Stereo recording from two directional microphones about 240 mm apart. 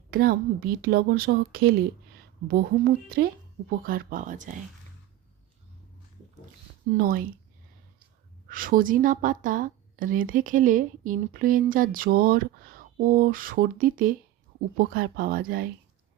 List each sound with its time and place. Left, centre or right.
0.1 s a woman's voice: right
6.9 s a woman's voice: right
8.4 s a woman's voice: right